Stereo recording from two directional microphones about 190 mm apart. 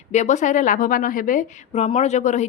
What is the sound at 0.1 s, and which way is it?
A woman's voice, 40° left (ahead or behind).